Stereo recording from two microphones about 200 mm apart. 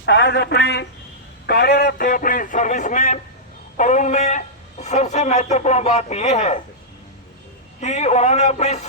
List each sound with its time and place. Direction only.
0.0 s a man's voice: 60° left (ahead or behind); by 6.6 s 35° left (ahead or behind)
7.8 s a man's voice: 35° left (ahead or behind)